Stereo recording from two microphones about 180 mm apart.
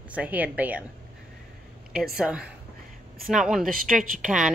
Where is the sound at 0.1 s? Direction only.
10° right (ahead or behind).